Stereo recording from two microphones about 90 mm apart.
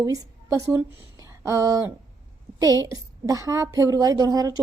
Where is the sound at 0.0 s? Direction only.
40° right (ahead or behind).